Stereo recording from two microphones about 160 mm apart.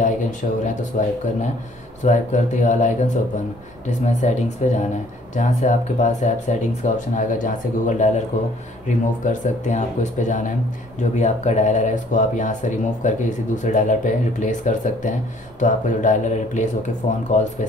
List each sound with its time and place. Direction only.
0.0 s speech: 50° left (ahead or behind)
2.0 s speech: 50° left (ahead or behind)